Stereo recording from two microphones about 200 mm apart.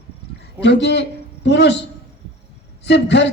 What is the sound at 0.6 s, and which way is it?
A woman's voice, 60° left (ahead or behind).